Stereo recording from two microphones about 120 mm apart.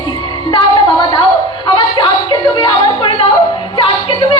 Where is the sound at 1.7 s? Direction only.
40° left (ahead or behind).